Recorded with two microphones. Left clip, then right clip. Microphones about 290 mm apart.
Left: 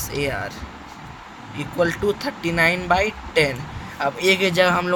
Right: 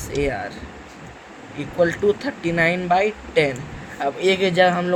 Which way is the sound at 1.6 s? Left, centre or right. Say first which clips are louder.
Right 2 dB; left.